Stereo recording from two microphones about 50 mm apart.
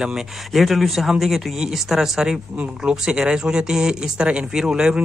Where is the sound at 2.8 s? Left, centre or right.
Centre.